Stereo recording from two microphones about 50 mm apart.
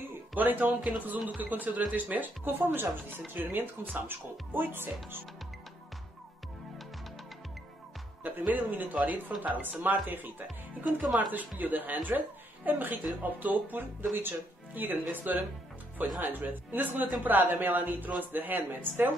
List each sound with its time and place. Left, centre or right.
0.3 s speech: right
2.6 s speech: right
8.2 s speech: right